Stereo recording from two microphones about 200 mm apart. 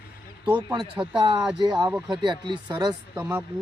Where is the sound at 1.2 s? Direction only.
20° right (ahead or behind).